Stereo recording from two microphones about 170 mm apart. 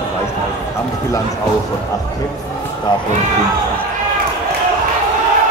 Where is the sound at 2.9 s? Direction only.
25° left (ahead or behind).